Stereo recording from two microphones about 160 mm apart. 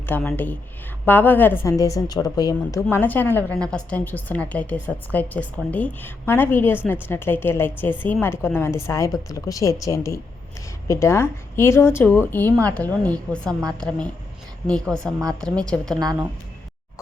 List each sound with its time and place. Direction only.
0.0 s a woman's voice: 10° left (ahead or behind)